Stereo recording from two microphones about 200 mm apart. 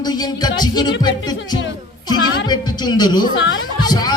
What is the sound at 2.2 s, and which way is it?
Speech, 75° left (ahead or behind).